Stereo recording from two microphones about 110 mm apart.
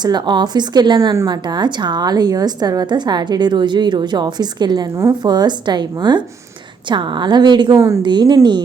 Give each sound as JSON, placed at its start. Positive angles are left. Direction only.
{"t": 0.0, "sound": "a woman's voice", "side_deg": -40}